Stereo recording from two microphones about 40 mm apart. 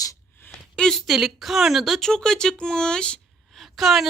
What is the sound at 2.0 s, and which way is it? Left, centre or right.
A woman's voice, centre.